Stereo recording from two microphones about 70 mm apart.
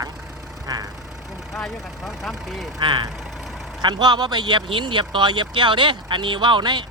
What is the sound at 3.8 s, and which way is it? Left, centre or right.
Speech, right.